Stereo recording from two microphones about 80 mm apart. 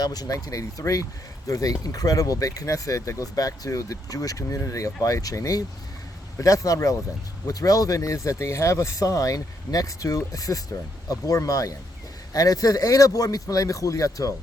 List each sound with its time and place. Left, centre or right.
0.0 s speech: left